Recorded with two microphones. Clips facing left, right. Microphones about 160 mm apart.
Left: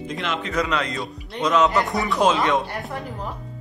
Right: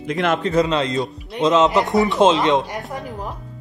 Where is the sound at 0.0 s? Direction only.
70° right (ahead or behind).